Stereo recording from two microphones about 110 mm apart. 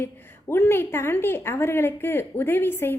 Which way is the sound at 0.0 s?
20° left (ahead or behind).